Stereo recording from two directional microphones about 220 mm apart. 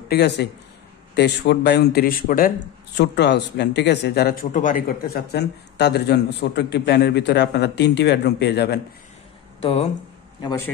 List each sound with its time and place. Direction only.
0.1 s speech: 50° left (ahead or behind)
9.6 s speech: 25° left (ahead or behind)